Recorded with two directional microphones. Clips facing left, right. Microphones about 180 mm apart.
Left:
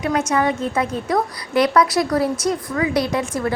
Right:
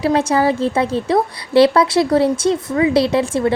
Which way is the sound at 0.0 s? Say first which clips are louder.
Right 4 dB; 30° right (ahead or behind).